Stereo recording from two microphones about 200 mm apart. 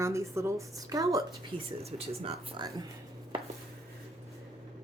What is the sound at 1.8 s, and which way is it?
Speech, 30° right (ahead or behind).